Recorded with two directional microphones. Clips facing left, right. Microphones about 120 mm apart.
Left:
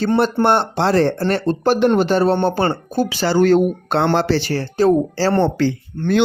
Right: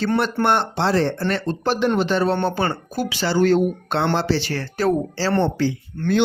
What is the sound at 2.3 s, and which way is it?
Speech, 30° left (ahead or behind).